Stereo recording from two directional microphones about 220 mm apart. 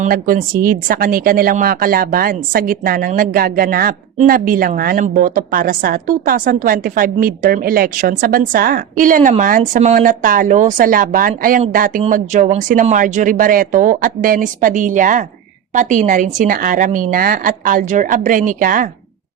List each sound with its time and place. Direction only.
0.0 s speech: 40° right (ahead or behind)